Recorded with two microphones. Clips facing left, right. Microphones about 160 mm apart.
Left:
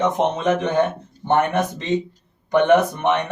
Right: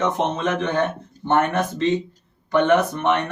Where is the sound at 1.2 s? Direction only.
15° left (ahead or behind).